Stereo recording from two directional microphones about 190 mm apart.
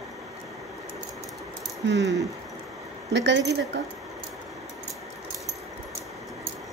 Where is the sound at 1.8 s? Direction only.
65° right (ahead or behind).